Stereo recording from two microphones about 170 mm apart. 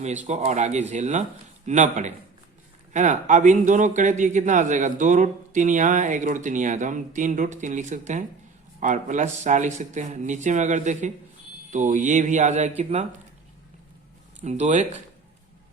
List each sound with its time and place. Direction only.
0.3 s a man's voice: 40° right (ahead or behind)
14.4 s a man's voice: 40° right (ahead or behind)